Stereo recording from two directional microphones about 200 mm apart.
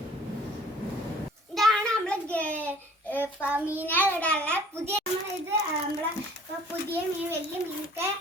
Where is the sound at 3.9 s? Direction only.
10° left (ahead or behind).